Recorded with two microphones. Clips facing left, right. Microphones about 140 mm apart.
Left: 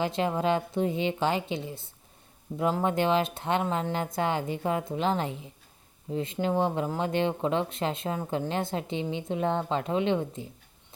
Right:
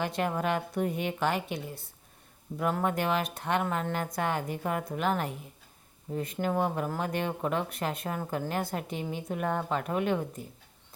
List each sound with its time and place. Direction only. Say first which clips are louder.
0.0 s speech: left 3 dB; 25° left (ahead or behind)